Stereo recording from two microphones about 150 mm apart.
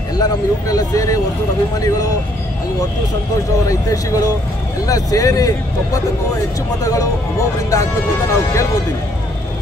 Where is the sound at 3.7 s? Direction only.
20° left (ahead or behind).